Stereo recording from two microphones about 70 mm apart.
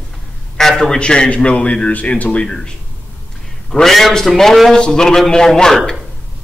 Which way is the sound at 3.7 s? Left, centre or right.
Centre.